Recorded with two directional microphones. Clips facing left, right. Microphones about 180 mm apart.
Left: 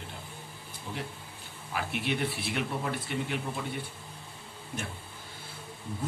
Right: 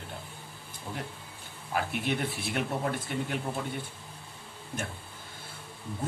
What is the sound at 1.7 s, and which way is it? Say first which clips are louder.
Speech: right 2 dB; 45° right (ahead or behind).